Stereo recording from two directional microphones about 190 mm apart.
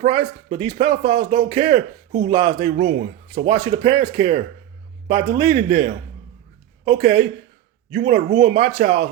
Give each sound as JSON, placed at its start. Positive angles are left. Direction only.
{"t": 0.0, "sound": "a man's voice", "side_deg": -35}